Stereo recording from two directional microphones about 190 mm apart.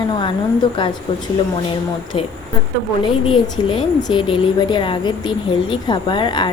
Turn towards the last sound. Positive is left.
turn(degrees=25)  # may be behind; listen again after turning